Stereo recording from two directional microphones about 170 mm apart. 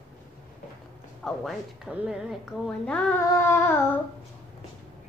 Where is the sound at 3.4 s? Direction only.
15° left (ahead or behind).